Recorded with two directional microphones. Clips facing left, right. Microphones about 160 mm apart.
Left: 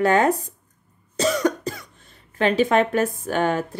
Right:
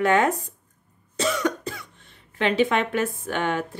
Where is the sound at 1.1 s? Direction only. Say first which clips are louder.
Left 4 dB; 40° left (ahead or behind).